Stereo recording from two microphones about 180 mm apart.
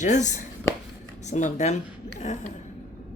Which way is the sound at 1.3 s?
40° left (ahead or behind).